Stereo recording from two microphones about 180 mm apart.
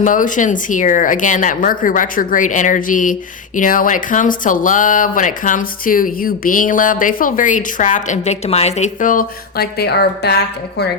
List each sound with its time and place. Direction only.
0.0 s speech: 45° left (ahead or behind); by 10.8 s 65° left (ahead or behind)